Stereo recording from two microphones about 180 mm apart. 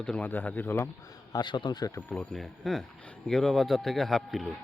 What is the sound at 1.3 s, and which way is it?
Speech, 25° left (ahead or behind).